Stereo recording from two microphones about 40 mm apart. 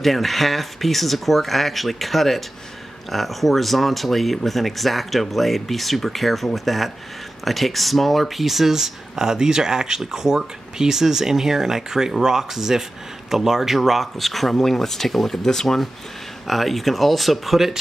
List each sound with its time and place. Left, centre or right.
0.0 s speech: centre